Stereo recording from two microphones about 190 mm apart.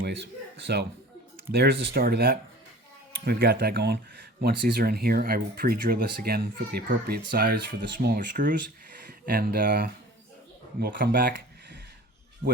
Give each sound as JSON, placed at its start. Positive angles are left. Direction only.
{"t": 0.0, "sound": "speech", "side_deg": -65}